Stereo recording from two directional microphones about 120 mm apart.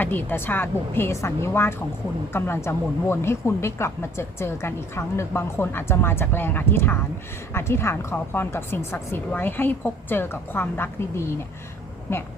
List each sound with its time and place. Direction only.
0.0 s speech: 15° left (ahead or behind)